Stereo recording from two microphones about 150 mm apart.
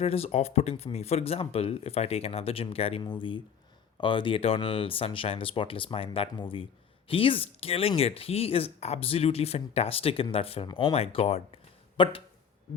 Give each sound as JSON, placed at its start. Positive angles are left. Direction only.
{"t": 0.0, "sound": "speech", "side_deg": 40}
{"t": 10.7, "sound": "speech", "side_deg": 30}
{"t": 10.9, "sound": "speech", "side_deg": 40}